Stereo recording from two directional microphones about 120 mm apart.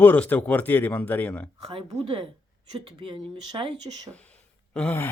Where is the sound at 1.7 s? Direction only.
45° right (ahead or behind).